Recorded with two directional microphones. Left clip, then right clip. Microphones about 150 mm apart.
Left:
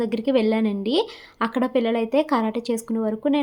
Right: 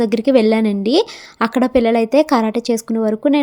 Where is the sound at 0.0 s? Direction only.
45° right (ahead or behind).